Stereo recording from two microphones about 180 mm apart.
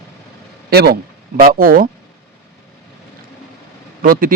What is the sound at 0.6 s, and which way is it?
Speech, 60° right (ahead or behind).